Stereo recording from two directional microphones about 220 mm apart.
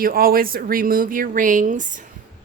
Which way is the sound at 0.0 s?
40° right (ahead or behind).